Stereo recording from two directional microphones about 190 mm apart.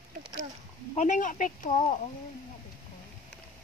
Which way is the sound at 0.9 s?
40° left (ahead or behind).